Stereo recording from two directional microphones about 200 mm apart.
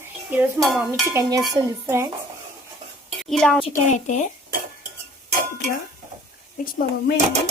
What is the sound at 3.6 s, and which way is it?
Speech, 35° left (ahead or behind).